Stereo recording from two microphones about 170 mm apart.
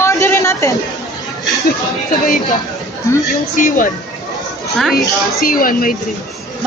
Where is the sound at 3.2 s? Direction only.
50° left (ahead or behind).